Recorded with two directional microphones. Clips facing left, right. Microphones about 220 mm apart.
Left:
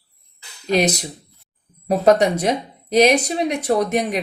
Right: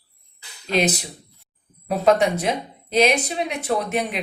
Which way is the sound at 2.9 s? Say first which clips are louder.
Left 4 dB; 45° left (ahead or behind).